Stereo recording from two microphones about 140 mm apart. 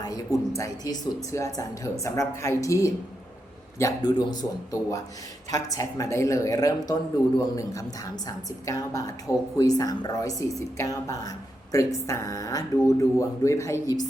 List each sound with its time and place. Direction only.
0.0 s speech: 25° left (ahead or behind)